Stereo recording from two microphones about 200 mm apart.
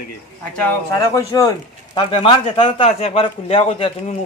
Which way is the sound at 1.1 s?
15° left (ahead or behind).